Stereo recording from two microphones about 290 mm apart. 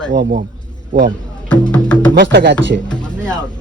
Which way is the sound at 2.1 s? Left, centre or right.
Right.